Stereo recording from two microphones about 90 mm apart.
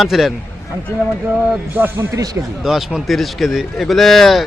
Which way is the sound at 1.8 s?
20° right (ahead or behind).